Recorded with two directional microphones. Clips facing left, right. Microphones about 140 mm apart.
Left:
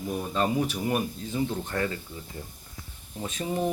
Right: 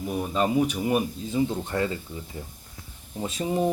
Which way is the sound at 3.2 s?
20° right (ahead or behind).